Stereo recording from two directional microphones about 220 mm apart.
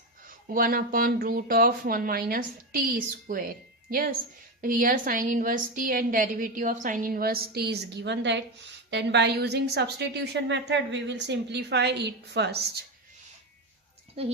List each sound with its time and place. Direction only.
0.5 s a woman's voice: 40° right (ahead or behind)